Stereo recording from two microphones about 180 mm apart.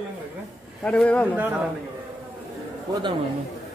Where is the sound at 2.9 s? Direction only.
25° right (ahead or behind).